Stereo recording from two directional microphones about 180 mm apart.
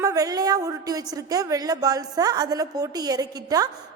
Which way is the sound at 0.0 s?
20° right (ahead or behind).